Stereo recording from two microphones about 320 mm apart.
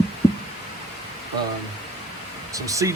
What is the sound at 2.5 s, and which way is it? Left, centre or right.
Speech, centre.